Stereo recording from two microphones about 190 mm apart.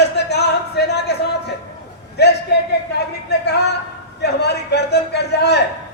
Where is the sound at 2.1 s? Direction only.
60° left (ahead or behind).